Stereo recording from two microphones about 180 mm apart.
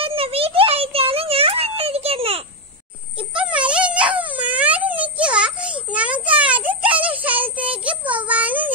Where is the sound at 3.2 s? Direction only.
5° right (ahead or behind).